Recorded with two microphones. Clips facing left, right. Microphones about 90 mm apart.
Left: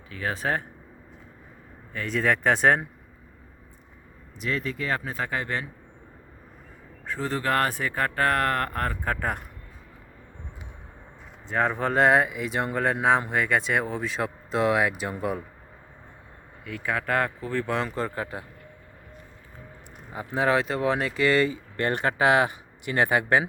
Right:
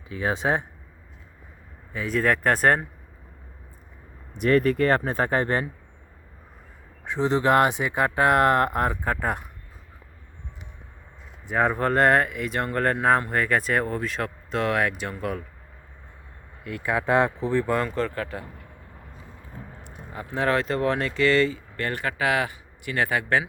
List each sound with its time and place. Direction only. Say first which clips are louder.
0.1 s speech: right 4 dB; 20° right (ahead or behind)
1.9 s speech: right 2 dB; 5° right (ahead or behind)
4.4 s speech: right 10 dB; 55° right (ahead or behind)
7.0 s speech: right 6 dB; 20° right (ahead or behind)
9.0 s speech: right 2 dB; 5° right (ahead or behind)
11.4 s speech: right 2 dB; 10° right (ahead or behind)
14.2 s speech: left 1 dB; 10° left (ahead or behind)
16.6 s speech: right 3 dB; 5° right (ahead or behind)
17.7 s speech: right 3 dB; centre (ahead or behind)
20.1 s speech: left 1 dB; 10° left (ahead or behind)